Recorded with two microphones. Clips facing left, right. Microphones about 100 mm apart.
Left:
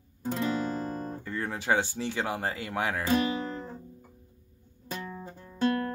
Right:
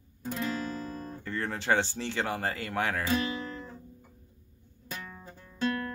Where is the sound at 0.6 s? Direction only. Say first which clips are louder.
Left 4 dB; 50° left (ahead or behind).